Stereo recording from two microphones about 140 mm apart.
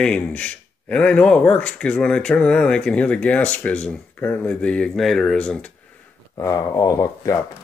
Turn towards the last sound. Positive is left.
turn(degrees=20)  # may be behind; listen again after turning